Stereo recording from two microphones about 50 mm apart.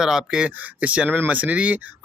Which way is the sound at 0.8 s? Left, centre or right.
Right.